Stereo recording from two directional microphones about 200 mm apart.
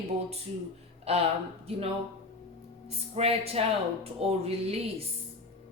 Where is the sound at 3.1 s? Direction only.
30° right (ahead or behind).